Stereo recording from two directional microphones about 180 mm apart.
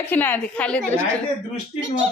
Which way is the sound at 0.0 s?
10° left (ahead or behind).